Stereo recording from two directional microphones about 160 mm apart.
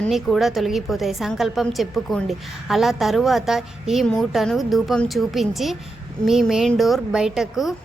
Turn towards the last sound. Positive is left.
turn(degrees=0)  # may be behind; listen again after turning